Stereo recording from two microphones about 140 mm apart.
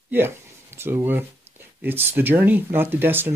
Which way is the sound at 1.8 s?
15° right (ahead or behind).